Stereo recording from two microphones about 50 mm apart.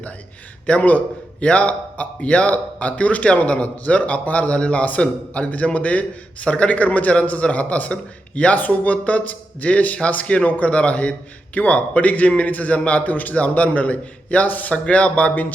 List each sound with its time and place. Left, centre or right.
0.7 s a man's voice: left